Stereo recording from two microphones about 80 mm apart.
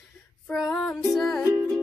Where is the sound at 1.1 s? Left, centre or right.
Centre.